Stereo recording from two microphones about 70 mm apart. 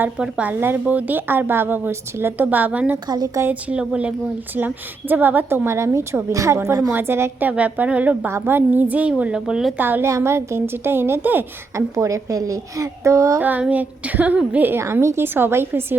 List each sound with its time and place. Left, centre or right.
0.2 s a woman's voice: centre
0.6 s a woman's voice: right
4.5 s a woman's voice: right
5.6 s a woman's voice: right
8.3 s a woman's voice: right; by 9.6 s centre
9.7 s a woman's voice: right
10.0 s a woman's voice: right
11.9 s speech: right
13.4 s a woman's voice: right
15.0 s a woman's voice: right